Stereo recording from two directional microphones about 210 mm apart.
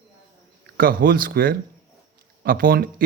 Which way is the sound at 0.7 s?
45° right (ahead or behind).